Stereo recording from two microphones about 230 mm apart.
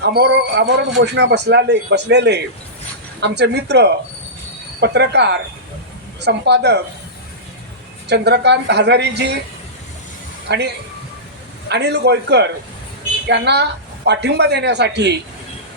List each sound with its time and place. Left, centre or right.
0.0 s speech: right
8.0 s speech: right
10.5 s speech: right
11.7 s speech: right